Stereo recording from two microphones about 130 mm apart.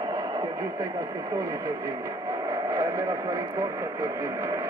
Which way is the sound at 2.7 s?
25° right (ahead or behind).